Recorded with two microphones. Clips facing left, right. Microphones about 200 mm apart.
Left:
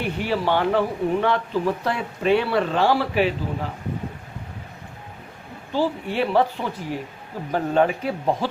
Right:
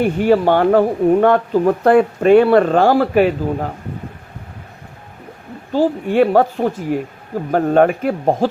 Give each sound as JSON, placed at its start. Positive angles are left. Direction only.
{"t": 0.0, "sound": "speech", "side_deg": -50}
{"t": 5.7, "sound": "speech", "side_deg": -45}